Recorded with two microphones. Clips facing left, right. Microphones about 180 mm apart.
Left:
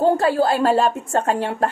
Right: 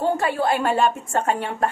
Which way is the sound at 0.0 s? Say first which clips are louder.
Left 5 dB; 30° left (ahead or behind).